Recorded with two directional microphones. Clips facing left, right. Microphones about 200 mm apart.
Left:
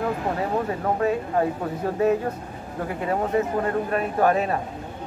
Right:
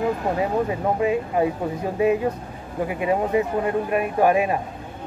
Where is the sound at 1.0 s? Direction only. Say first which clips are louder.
Right 1 dB; 15° right (ahead or behind).